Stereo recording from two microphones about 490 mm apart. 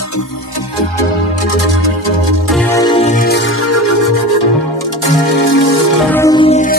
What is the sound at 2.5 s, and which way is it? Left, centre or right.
Music, centre.